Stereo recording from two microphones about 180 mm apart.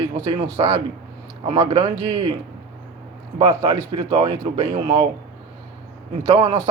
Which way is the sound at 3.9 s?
20° right (ahead or behind).